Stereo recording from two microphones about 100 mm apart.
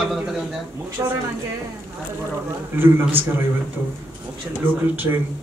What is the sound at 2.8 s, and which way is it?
Speech, 20° right (ahead or behind).